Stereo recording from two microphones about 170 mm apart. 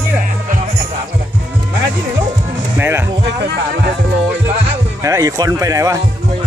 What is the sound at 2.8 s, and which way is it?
Speech, 10° right (ahead or behind).